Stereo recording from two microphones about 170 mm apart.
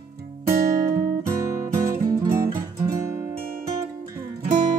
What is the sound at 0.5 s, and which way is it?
Music, 20° right (ahead or behind).